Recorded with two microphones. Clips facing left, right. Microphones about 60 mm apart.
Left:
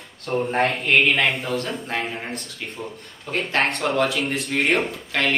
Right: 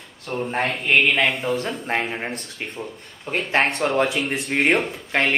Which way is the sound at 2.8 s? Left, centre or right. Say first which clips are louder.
Even; centre.